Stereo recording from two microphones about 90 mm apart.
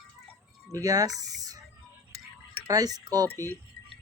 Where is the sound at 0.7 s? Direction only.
45° right (ahead or behind).